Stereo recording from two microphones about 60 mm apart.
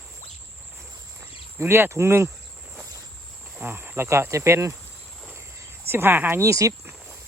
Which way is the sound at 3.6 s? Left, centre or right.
Right.